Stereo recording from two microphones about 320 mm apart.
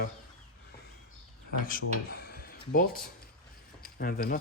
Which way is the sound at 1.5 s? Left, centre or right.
Left.